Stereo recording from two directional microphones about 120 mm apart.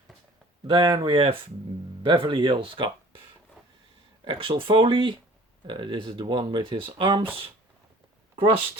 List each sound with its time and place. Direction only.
0.7 s speech: 40° right (ahead or behind)
3.6 s a sound: centre (ahead or behind)
4.2 s speech: 45° right (ahead or behind)